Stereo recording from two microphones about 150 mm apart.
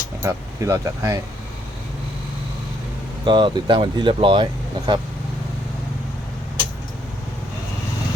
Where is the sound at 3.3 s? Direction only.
30° right (ahead or behind).